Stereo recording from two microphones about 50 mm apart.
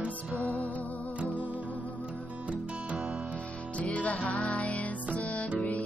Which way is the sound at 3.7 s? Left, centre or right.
Left.